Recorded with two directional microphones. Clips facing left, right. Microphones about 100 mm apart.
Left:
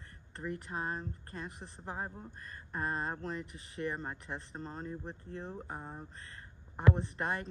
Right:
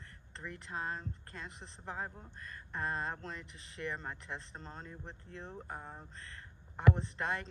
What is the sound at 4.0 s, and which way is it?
Speech, 30° left (ahead or behind).